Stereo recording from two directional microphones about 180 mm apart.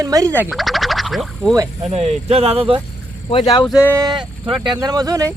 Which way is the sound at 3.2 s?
30° left (ahead or behind).